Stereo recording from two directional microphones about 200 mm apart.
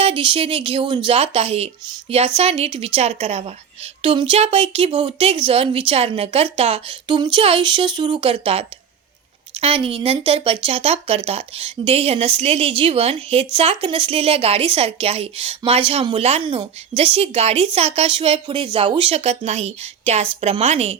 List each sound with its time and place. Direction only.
0.0 s a woman's voice: 25° right (ahead or behind)